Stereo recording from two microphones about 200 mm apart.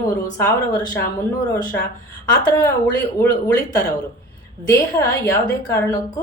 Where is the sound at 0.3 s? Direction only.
15° left (ahead or behind).